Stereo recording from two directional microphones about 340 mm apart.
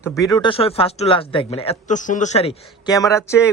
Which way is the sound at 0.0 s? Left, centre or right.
Centre.